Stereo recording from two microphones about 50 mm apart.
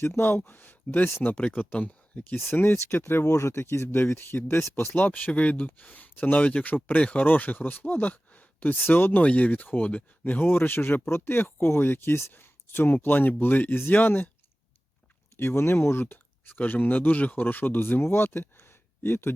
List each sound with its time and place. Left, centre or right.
0.2 s speech: left
1.4 s speech: left
2.5 s speech: left
2.7 s speech: left
4.9 s speech: left
7.0 s speech: left
7.3 s speech: left
9.2 s speech: left
10.4 s speech: left
11.5 s speech: left
15.4 s speech: left
16.6 s speech: left